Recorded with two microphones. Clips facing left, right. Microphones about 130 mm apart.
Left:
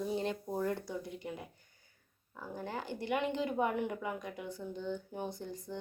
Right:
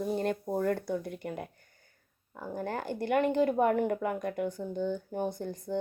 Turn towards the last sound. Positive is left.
turn(degrees=-50)  # may be behind; listen again after turning